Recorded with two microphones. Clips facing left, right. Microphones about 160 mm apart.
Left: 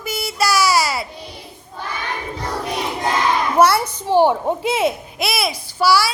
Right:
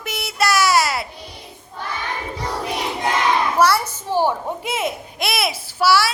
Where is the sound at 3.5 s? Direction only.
55° left (ahead or behind).